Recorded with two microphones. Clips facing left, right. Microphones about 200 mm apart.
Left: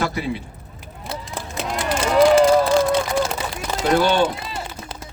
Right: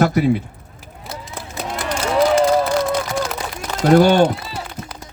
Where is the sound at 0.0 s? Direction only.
45° right (ahead or behind).